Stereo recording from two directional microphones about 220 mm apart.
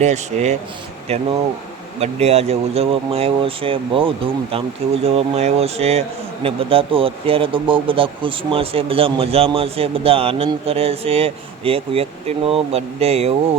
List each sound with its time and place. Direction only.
0.0 s speech: 30° right (ahead or behind)